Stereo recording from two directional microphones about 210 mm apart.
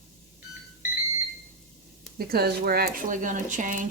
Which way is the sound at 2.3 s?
45° right (ahead or behind).